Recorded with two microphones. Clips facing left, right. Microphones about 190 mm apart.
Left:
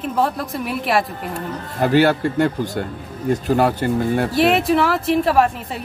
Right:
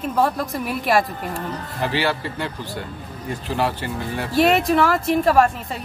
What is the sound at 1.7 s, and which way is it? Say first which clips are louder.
Speech: left 8 dB; 45° left (ahead or behind).